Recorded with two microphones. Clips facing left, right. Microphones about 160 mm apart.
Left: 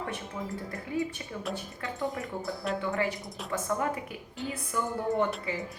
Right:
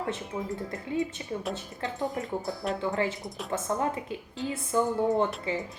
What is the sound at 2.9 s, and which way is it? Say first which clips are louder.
Speech: right 1 dB; 25° right (ahead or behind).